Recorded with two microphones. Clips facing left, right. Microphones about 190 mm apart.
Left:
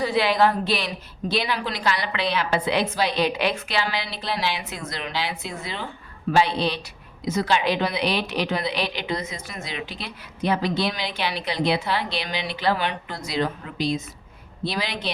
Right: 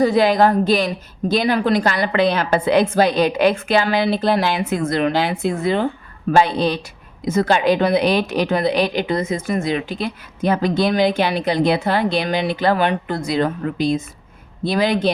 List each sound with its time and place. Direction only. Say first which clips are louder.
0.0 s speech: right 6 dB; 45° right (ahead or behind)